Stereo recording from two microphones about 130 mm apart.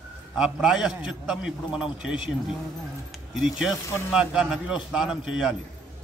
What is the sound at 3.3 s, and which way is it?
A man's voice, 5° right (ahead or behind).